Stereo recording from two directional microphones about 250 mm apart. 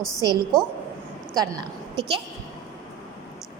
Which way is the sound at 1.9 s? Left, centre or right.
Centre.